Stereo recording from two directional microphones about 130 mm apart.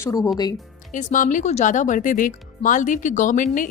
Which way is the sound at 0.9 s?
85° left.